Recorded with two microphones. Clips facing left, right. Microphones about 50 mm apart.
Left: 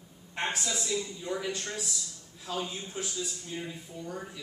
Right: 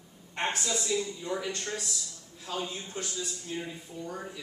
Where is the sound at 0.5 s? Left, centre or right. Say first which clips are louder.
Right 2 dB; centre.